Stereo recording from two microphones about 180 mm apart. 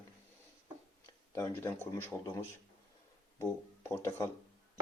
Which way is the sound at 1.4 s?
15° left (ahead or behind).